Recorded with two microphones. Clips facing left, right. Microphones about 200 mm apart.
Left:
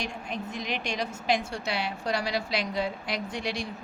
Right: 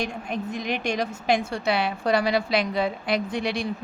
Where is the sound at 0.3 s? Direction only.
50° right (ahead or behind).